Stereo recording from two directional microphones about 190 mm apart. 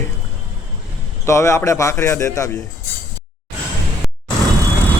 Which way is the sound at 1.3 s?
15° left (ahead or behind).